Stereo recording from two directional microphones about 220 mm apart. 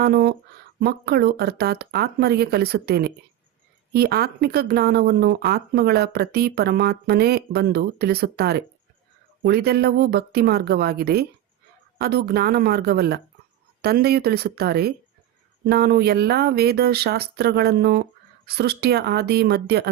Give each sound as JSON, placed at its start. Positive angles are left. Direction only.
{"t": 0.0, "sound": "speech", "side_deg": -45}